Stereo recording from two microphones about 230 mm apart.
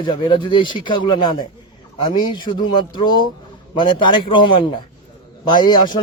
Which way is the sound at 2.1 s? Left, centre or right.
Centre.